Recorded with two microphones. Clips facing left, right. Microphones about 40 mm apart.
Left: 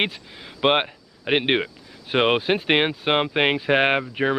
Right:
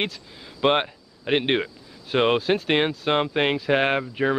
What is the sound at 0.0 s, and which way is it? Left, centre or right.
Speech, left.